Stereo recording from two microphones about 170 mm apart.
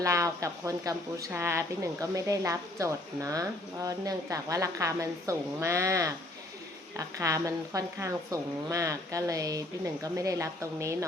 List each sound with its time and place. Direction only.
0.0 s a woman's voice: 20° right (ahead or behind)